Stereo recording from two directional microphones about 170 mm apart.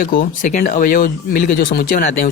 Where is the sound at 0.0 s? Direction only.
55° left (ahead or behind).